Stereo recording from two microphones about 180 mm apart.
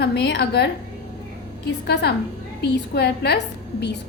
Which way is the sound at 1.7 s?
70° left (ahead or behind).